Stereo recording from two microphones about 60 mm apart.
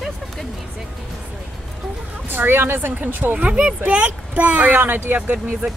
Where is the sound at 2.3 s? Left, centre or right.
Right.